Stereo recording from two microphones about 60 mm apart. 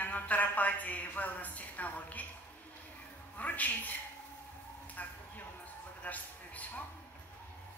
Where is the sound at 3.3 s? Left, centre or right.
Left.